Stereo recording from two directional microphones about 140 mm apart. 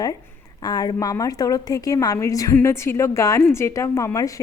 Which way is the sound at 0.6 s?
30° left (ahead or behind).